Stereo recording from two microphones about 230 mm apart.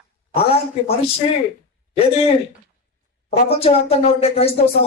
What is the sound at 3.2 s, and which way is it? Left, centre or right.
Speech, left.